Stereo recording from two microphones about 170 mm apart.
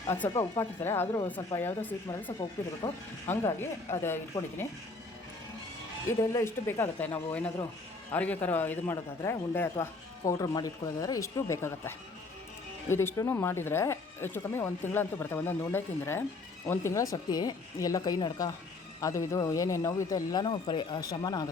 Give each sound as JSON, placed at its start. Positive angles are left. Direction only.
{"t": 0.1, "sound": "a man's voice", "side_deg": 15}
{"t": 6.3, "sound": "a man's voice", "side_deg": 15}